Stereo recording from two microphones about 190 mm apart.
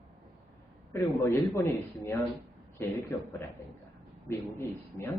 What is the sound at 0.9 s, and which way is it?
Speech, 10° left (ahead or behind).